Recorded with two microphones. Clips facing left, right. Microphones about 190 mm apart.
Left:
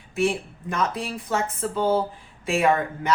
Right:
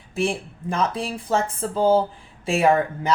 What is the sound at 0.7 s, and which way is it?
Speech, 30° right (ahead or behind).